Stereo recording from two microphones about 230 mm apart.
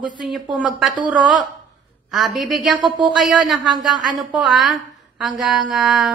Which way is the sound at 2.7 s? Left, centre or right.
Centre.